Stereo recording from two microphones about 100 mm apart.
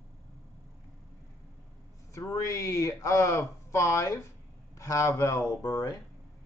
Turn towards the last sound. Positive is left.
turn(degrees=40)  # may be behind; listen again after turning